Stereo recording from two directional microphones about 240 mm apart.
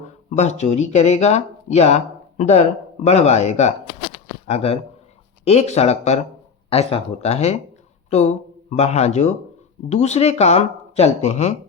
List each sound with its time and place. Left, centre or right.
0.3 s speech: left